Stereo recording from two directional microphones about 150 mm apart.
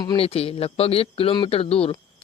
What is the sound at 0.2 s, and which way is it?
Speech, 40° left (ahead or behind).